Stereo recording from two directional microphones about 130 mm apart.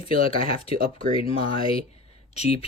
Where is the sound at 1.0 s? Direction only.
45° left (ahead or behind).